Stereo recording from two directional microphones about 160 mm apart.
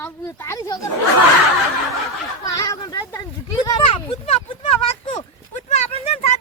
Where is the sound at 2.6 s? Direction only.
20° left (ahead or behind).